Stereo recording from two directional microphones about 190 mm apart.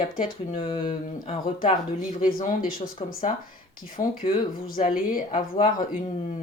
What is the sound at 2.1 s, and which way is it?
Speech, 45° left (ahead or behind).